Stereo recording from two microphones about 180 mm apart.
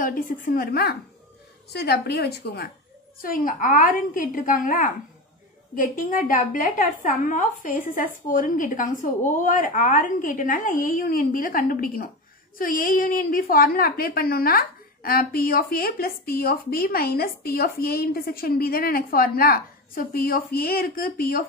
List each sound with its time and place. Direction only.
0.0 s a woman's voice: 50° left (ahead or behind)
3.2 s a woman's voice: 50° left (ahead or behind)